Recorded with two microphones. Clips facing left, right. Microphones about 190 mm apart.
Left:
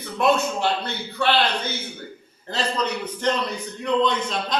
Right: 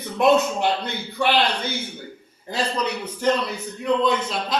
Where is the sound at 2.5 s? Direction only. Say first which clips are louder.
Even; 10° right (ahead or behind).